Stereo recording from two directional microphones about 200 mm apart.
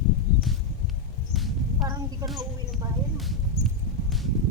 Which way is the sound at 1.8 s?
15° right (ahead or behind).